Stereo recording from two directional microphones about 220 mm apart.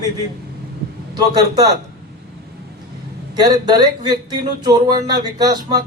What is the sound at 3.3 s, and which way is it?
Speech, 20° right (ahead or behind).